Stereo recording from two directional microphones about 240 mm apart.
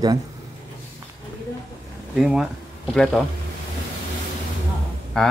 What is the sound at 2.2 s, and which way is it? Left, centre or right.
Speech, centre.